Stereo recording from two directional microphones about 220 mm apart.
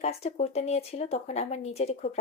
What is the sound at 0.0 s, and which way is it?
Speech, 30° left (ahead or behind).